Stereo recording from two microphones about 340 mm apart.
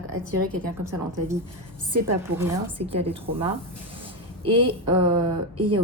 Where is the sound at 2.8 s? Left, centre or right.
Right.